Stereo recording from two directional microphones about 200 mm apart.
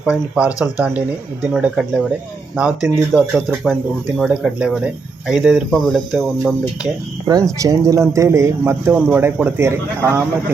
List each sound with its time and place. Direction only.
0.0 s speech: 5° right (ahead or behind)
7.3 s a man's voice: 15° right (ahead or behind)